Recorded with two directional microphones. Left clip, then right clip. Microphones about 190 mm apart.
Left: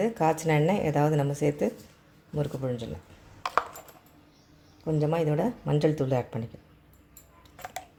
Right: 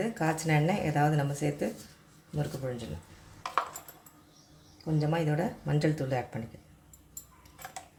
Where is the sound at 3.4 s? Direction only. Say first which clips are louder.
Left 4 dB; 55° left (ahead or behind).